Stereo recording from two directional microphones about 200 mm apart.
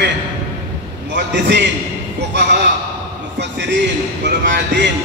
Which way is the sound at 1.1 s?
60° right (ahead or behind).